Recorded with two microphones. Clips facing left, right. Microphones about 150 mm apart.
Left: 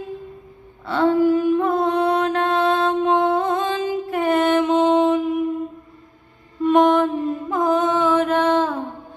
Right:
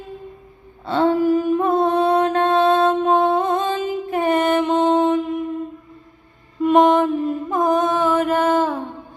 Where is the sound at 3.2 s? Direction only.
20° right (ahead or behind).